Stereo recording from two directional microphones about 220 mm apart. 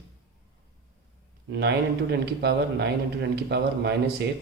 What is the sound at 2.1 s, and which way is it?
Speech, 50° right (ahead or behind).